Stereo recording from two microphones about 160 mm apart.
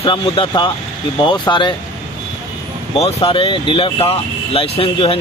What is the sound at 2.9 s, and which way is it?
Speech, 35° left (ahead or behind).